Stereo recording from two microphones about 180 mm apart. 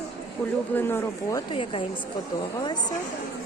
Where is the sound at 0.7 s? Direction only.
10° left (ahead or behind); by 1.8 s 30° left (ahead or behind).